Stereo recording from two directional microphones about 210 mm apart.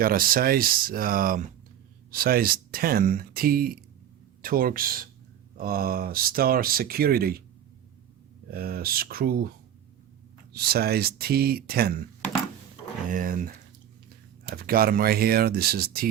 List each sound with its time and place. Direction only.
0.0 s speech: 45° right (ahead or behind)
8.4 s speech: 45° right (ahead or behind)
10.5 s speech: 50° right (ahead or behind)
13.1 s speech: 40° right (ahead or behind)
14.5 s speech: 45° right (ahead or behind)